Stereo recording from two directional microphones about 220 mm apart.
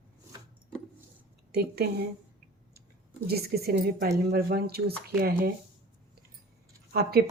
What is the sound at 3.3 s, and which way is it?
Speech, 45° right (ahead or behind).